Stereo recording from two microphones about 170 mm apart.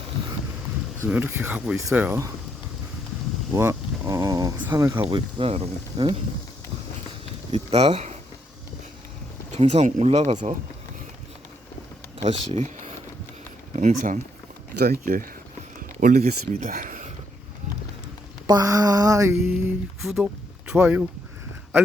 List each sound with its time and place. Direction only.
1.0 s speech: 10° right (ahead or behind)
3.5 s speech: 15° right (ahead or behind)
5.1 s speech: 35° right (ahead or behind)
7.5 s speech: 35° right (ahead or behind)
9.5 s speech: 40° right (ahead or behind)
12.2 s speech: 45° right (ahead or behind)
15.0 s speech: 55° right (ahead or behind)
18.4 s mantra: 20° right (ahead or behind)
20.0 s speech: centre (ahead or behind)